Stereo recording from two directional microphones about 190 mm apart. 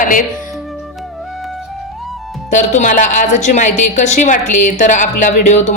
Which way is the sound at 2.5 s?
40° left (ahead or behind).